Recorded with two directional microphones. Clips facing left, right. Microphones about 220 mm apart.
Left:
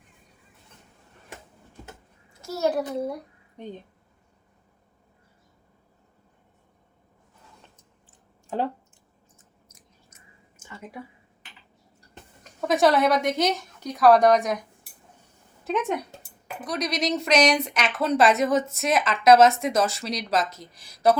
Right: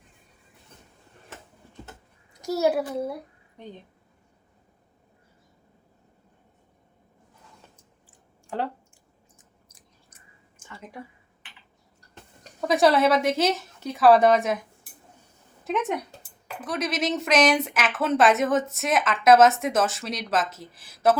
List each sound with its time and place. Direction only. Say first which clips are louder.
2.4 s a child's voice: right 2 dB; 10° right (ahead or behind)
8.4 s speech: left 2 dB; 15° left (ahead or behind)
9.6 s chewing: left 1 dB; 35° right (ahead or behind)
12.5 s speech: even; centre (ahead or behind)
16.6 s speech: even; 5° right (ahead or behind)